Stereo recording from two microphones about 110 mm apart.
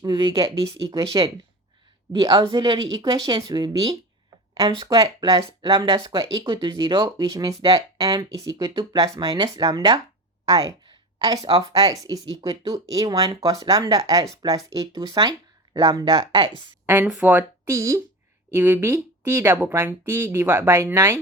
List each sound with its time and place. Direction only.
0.0 s speech: 40° right (ahead or behind)
0.9 s a woman's voice: 35° right (ahead or behind)
10.8 s a sound: 35° right (ahead or behind)
11.7 s speech: 35° right (ahead or behind)
16.8 s speech: 20° right (ahead or behind)
17.7 s speech: 25° right (ahead or behind)